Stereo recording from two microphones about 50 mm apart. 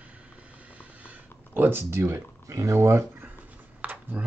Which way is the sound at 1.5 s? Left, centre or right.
Right.